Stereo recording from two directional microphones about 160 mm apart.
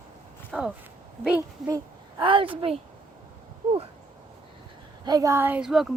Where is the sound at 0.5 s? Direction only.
5° right (ahead or behind).